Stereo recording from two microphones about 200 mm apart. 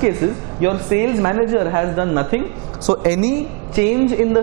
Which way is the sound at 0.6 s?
20° right (ahead or behind).